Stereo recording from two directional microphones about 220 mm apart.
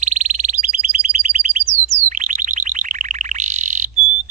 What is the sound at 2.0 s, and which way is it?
Chirp tone, 35° right (ahead or behind).